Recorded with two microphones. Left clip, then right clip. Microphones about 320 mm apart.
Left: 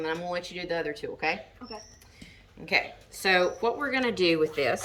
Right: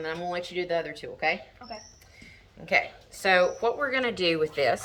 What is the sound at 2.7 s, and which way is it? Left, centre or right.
A woman's voice, centre.